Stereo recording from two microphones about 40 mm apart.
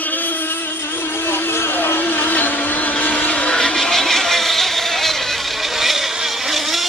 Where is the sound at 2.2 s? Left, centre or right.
Left.